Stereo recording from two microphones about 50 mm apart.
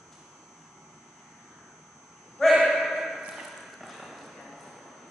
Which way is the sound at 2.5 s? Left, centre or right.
Centre.